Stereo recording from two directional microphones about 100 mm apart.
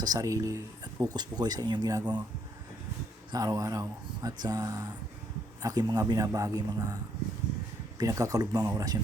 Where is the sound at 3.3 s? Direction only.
40° right (ahead or behind).